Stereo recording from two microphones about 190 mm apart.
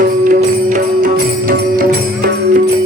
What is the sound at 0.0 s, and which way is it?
Music, 45° right (ahead or behind).